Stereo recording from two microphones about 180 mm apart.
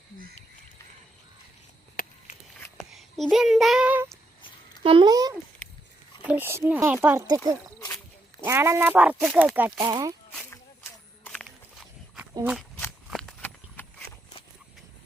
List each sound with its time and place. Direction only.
2.9 s child singing: centre (ahead or behind)
4.8 s speech: 30° right (ahead or behind)
6.2 s speech: 10° right (ahead or behind)
7.3 s a sound: 20° left (ahead or behind)
8.4 s speech: 15° right (ahead or behind)
9.8 s speech: 20° right (ahead or behind)
10.5 s walk: 10° left (ahead or behind); by 12.3 s 5° right (ahead or behind)
13.1 s a sound: centre (ahead or behind)
13.8 s horse: 10° left (ahead or behind)